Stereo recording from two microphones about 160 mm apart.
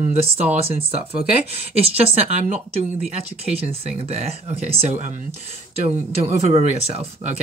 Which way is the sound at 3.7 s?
40° right (ahead or behind).